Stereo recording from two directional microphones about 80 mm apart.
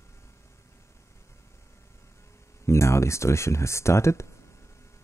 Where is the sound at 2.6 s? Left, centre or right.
Left.